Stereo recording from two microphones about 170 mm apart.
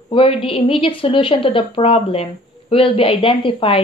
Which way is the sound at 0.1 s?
30° left (ahead or behind).